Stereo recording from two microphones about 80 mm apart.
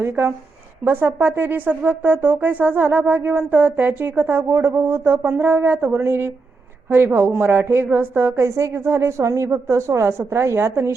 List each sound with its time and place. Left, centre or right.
0.0 s a woman's voice: right
8.4 s a woman's voice: right